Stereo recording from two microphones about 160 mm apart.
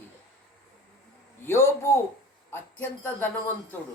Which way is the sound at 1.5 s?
15° left (ahead or behind).